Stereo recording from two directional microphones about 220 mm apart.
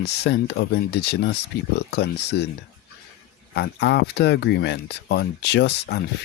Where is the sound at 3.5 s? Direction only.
50° left (ahead or behind).